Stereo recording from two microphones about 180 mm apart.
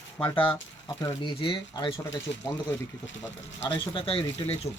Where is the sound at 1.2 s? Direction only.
25° left (ahead or behind).